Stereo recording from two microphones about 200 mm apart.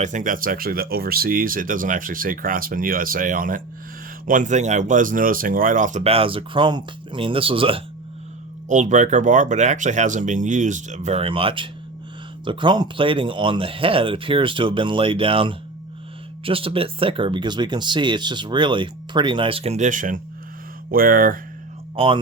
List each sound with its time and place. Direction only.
0.0 s speech: 40° right (ahead or behind)
8.7 s speech: 40° right (ahead or behind)
21.9 s speech: 25° right (ahead or behind)